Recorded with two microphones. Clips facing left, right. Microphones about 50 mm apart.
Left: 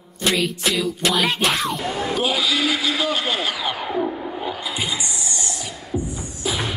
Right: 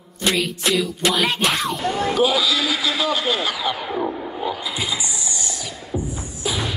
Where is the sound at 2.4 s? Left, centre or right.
Centre.